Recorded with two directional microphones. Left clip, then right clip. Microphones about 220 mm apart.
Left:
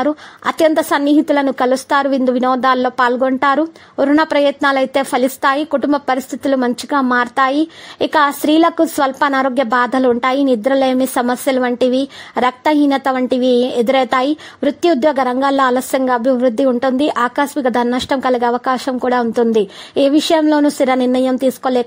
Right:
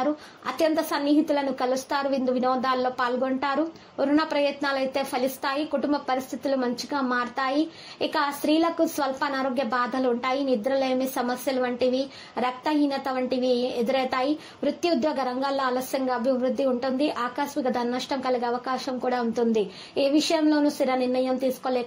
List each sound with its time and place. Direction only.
0.0 s a woman's voice: 45° left (ahead or behind)